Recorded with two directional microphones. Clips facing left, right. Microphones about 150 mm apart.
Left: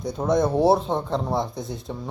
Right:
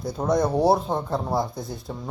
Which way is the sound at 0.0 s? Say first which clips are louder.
Left 1 dB; centre (ahead or behind).